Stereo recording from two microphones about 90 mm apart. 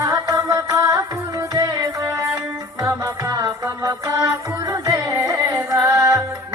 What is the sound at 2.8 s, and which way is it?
Music, 40° right (ahead or behind).